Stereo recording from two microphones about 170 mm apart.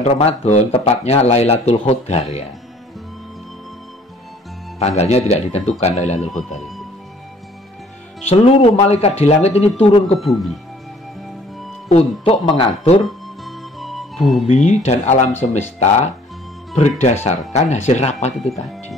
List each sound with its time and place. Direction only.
0.0 s a man's voice: 40° left (ahead or behind)
4.7 s a man's voice: 40° left (ahead or behind)
8.3 s a man's voice: 35° left (ahead or behind)
10.1 s speech: centre (ahead or behind)
11.9 s a man's voice: 35° left (ahead or behind)
13.0 s music: centre (ahead or behind)
14.5 s a man's voice: 40° left (ahead or behind)
17.0 s a man's voice: 40° left (ahead or behind)
18.5 s speech: centre (ahead or behind)